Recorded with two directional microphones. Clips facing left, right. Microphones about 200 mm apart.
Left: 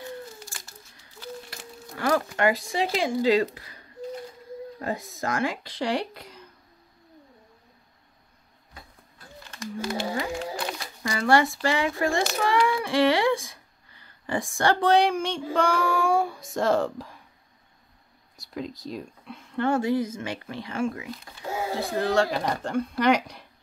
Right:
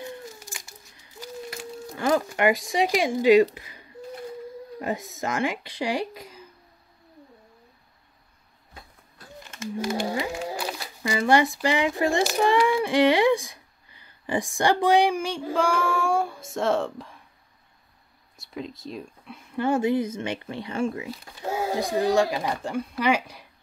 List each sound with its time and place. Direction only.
0.0 s a sound: 15° right (ahead or behind)
2.0 s speech: 20° right (ahead or behind)
10.1 s a sound: centre (ahead or behind); by 11.5 s 20° right (ahead or behind)
11.6 s speech: 20° right (ahead or behind); by 17.2 s centre (ahead or behind)
18.4 s speech: centre (ahead or behind)
19.6 s speech: 20° right (ahead or behind)
21.7 s speech: 15° right (ahead or behind)